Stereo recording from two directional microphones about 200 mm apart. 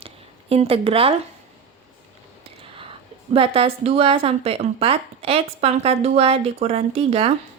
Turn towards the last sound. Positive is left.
turn(degrees=-30)  # may be behind; listen again after turning